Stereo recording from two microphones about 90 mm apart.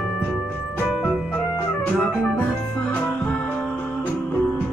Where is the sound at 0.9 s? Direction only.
5° right (ahead or behind).